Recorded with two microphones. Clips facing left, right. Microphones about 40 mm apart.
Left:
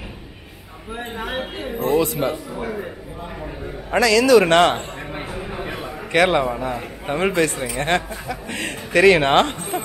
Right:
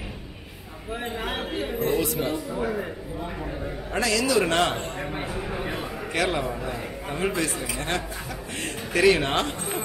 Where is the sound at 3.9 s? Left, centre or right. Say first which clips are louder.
Left 10 dB; left.